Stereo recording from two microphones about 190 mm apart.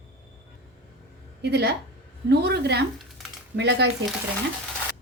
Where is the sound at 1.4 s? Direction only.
55° right (ahead or behind).